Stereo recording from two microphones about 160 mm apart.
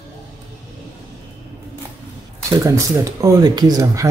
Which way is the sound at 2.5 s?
20° right (ahead or behind).